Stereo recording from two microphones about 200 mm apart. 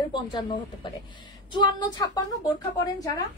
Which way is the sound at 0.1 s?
20° left (ahead or behind).